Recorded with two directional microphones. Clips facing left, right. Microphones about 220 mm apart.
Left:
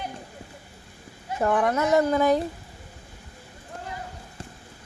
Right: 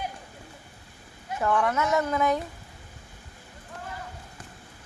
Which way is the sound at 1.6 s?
35° left (ahead or behind).